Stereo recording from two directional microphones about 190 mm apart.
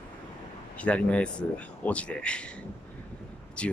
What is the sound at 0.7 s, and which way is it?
Speech, 5° left (ahead or behind).